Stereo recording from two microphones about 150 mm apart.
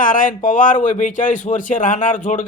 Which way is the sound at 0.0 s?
65° left (ahead or behind).